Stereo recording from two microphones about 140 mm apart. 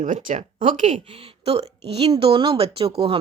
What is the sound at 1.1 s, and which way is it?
Speech, 45° right (ahead or behind).